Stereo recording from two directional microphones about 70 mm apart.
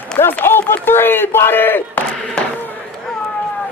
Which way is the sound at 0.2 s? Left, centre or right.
Left.